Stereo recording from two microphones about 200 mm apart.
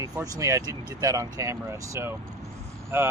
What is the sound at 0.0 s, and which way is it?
Speech, 15° right (ahead or behind).